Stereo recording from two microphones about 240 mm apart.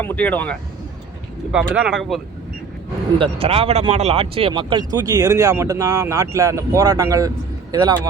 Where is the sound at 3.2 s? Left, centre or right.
Right.